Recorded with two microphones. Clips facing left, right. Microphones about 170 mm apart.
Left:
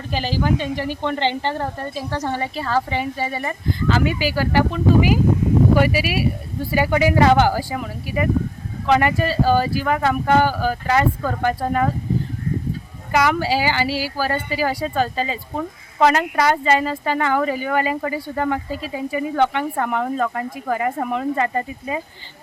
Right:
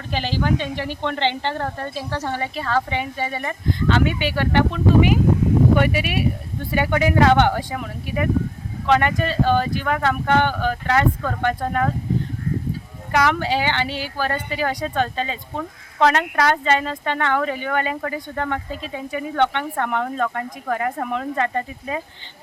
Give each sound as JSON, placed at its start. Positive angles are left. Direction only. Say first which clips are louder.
{"t": 0.1, "sound": "a woman's voice", "louder": "left 1 dB", "side_deg": 5}
{"t": 2.9, "sound": "speech", "louder": "left 2 dB", "side_deg": 35}
{"t": 3.3, "sound": "speech", "louder": "even", "side_deg": 5}
{"t": 13.1, "sound": "speech", "louder": "left 1 dB", "side_deg": 5}